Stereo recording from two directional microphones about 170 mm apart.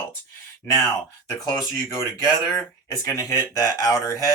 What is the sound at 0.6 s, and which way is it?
Speech, 20° left (ahead or behind).